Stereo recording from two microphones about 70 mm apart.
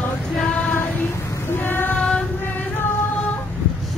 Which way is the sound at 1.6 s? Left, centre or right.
Left.